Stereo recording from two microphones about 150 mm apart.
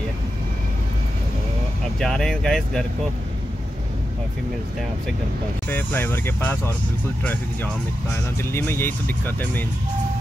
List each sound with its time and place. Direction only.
2.0 s speech: 5° left (ahead or behind)
5.7 s speech: 10° left (ahead or behind)
8.4 s speech: 15° left (ahead or behind)